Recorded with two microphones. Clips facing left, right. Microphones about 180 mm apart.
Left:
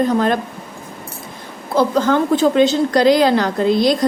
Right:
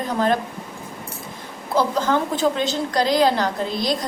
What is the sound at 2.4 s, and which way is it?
A woman's voice, 65° left (ahead or behind).